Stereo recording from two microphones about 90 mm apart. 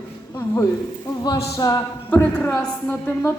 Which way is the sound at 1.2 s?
45° left (ahead or behind).